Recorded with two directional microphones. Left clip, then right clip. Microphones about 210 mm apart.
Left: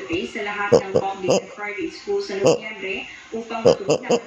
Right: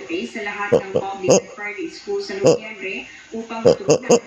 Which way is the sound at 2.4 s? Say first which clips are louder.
Right 3 dB; 25° right (ahead or behind).